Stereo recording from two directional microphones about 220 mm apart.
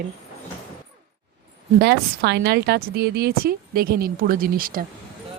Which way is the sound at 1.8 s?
50° right (ahead or behind).